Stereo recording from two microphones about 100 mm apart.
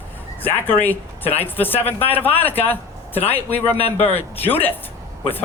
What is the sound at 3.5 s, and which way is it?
Speech, 80° left.